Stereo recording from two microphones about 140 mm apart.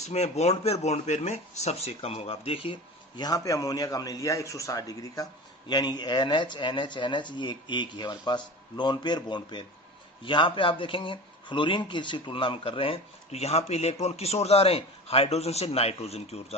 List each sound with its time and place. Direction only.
0.0 s speech: 50° left (ahead or behind)
3.2 s a man's voice: 25° left (ahead or behind); by 16.6 s 50° left (ahead or behind)